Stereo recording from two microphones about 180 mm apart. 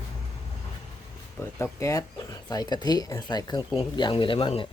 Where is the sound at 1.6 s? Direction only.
15° left (ahead or behind).